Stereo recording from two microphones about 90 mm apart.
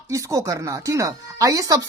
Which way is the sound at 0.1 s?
35° right (ahead or behind).